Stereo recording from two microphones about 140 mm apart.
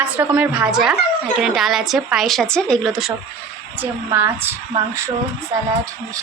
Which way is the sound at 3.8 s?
15° right (ahead or behind).